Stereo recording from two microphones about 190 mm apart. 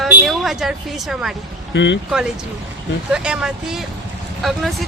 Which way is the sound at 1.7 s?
70° left (ahead or behind).